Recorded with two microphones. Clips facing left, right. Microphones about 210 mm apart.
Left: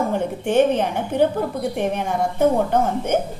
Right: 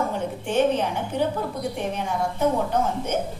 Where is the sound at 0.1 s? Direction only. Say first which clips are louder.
Left 6 dB; 55° left (ahead or behind).